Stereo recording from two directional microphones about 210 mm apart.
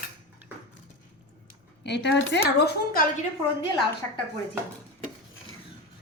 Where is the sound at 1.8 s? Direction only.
55° left (ahead or behind).